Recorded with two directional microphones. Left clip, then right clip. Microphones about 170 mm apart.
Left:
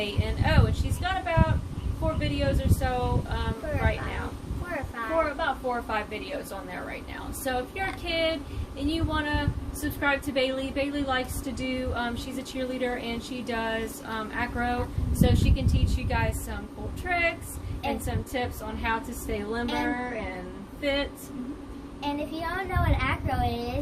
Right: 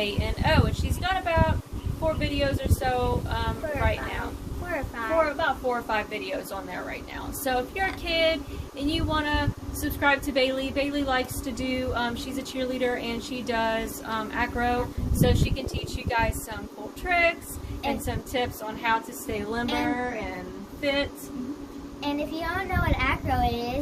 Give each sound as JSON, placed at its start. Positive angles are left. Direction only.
{"t": 0.0, "sound": "a woman's voice", "side_deg": -10}
{"t": 7.5, "sound": "speech", "side_deg": -10}
{"t": 19.6, "sound": "a woman's voice", "side_deg": 5}
{"t": 19.9, "sound": "speech", "side_deg": -10}
{"t": 22.0, "sound": "a woman's voice", "side_deg": 5}